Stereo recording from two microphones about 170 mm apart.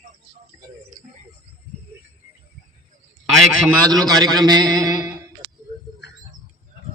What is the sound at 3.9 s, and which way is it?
A man's voice, 25° right (ahead or behind).